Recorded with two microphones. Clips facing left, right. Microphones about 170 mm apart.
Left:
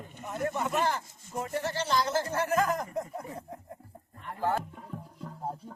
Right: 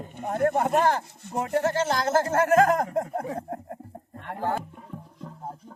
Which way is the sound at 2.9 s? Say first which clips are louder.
Right 8 dB; 60° right (ahead or behind).